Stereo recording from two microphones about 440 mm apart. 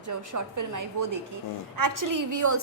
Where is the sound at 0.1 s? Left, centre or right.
Right.